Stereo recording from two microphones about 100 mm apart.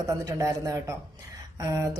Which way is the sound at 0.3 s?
35° right (ahead or behind).